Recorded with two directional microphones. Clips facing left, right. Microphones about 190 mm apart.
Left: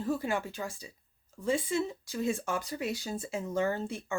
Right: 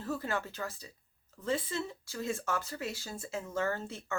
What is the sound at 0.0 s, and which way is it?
Speech, 15° left (ahead or behind).